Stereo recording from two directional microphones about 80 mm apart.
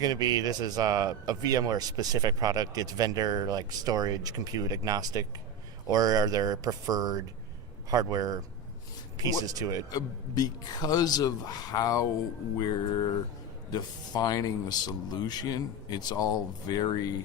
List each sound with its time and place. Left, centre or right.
0.0 s speech: right
9.9 s speech: left
13.7 s speech: left